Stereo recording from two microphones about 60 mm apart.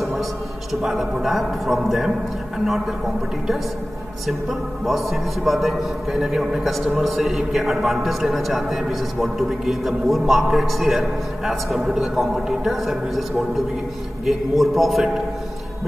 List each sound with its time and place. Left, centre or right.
0.8 s a man's voice: centre
4.3 s a man's voice: centre
14.2 s a man's voice: centre